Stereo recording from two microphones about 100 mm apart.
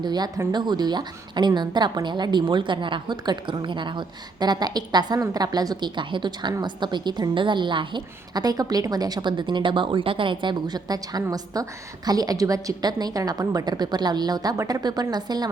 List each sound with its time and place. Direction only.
0.0 s a woman's voice: 45° right (ahead or behind)